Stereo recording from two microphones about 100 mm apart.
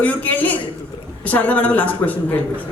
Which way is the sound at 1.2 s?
15° left (ahead or behind).